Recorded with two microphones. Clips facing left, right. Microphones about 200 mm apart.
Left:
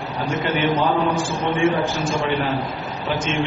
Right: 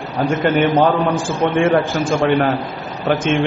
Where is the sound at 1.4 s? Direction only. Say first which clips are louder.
Right 5 dB; 65° right (ahead or behind).